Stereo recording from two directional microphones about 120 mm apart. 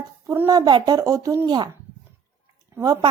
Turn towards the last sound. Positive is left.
turn(degrees=-30)  # may be behind; listen again after turning